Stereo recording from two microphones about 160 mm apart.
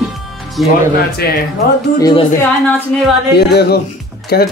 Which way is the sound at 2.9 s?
5° left (ahead or behind).